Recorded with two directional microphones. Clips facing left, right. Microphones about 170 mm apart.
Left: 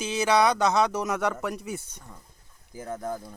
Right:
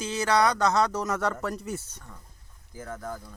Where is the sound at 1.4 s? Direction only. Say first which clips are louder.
Even; 15° left (ahead or behind).